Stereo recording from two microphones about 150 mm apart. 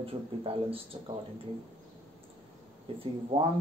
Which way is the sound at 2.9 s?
40° right (ahead or behind).